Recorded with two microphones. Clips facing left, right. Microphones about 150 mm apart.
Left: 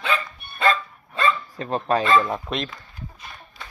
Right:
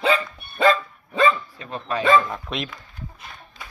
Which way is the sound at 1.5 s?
40° left (ahead or behind).